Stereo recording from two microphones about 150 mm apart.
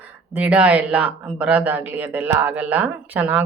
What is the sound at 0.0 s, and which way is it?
Speech, 10° right (ahead or behind).